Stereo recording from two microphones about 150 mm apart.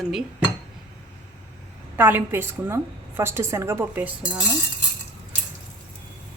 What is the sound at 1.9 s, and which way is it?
A woman's voice, 15° right (ahead or behind).